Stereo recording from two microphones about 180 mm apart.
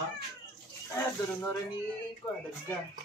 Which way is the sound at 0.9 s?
15° left (ahead or behind).